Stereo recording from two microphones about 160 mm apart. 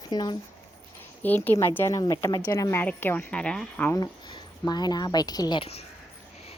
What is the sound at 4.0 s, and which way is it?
A woman's voice, 25° left (ahead or behind).